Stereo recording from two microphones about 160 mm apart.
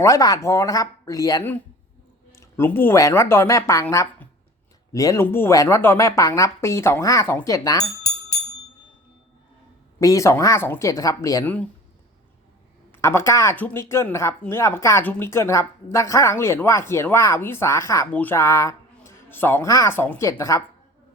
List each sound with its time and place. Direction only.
0.0 s a woman's voice: 20° left (ahead or behind)
10.0 s a woman's voice: 20° left (ahead or behind)
13.0 s speech: 15° left (ahead or behind)